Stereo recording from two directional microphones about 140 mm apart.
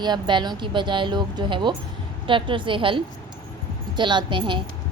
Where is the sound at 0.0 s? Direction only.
35° right (ahead or behind).